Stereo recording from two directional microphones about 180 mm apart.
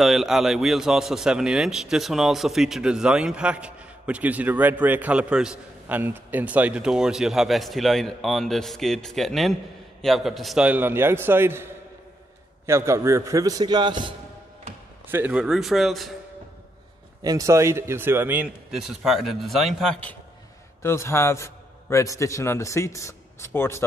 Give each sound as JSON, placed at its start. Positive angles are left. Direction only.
{"t": 0.0, "sound": "a man's voice", "side_deg": 0}
{"t": 12.6, "sound": "speech", "side_deg": -15}
{"t": 15.0, "sound": "a man's voice", "side_deg": -10}
{"t": 17.2, "sound": "a man's voice", "side_deg": -20}